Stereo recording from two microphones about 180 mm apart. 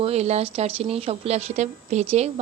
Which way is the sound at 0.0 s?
35° right (ahead or behind).